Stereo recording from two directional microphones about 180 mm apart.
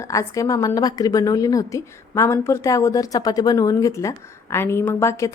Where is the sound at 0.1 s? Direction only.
15° left (ahead or behind).